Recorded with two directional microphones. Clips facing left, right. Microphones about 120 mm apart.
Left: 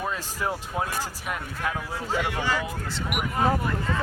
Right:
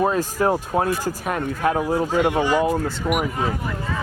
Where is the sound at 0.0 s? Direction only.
45° right (ahead or behind).